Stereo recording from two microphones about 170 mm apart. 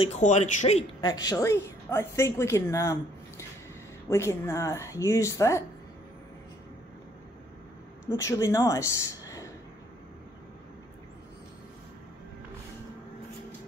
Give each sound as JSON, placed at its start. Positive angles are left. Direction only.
{"t": 0.0, "sound": "speech", "side_deg": 40}
{"t": 1.0, "sound": "a woman's voice", "side_deg": 20}
{"t": 8.1, "sound": "speech", "side_deg": 20}